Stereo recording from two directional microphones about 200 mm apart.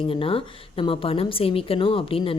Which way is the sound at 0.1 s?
25° left (ahead or behind).